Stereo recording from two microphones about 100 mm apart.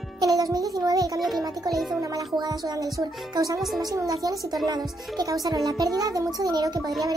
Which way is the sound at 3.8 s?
35° right (ahead or behind).